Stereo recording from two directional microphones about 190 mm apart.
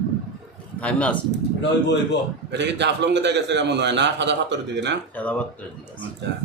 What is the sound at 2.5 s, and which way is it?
A man's voice, 65° right (ahead or behind).